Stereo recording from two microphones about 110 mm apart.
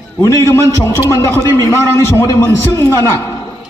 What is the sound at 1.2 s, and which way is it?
A man's voice, 25° left (ahead or behind).